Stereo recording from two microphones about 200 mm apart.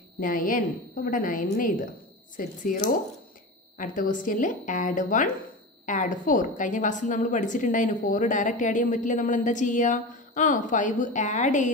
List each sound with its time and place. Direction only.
0.2 s a woman's voice: 45° left (ahead or behind)